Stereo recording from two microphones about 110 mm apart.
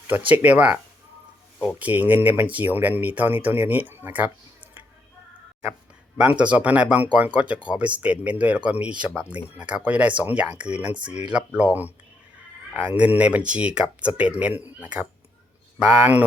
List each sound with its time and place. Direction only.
0.3 s speech: 15° right (ahead or behind)
1.8 s speech: 15° right (ahead or behind)
6.1 s speech: 10° right (ahead or behind)